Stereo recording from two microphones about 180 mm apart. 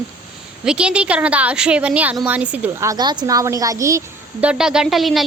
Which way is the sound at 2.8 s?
20° right (ahead or behind).